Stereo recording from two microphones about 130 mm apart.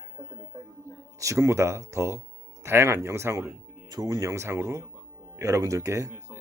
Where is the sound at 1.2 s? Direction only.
25° right (ahead or behind).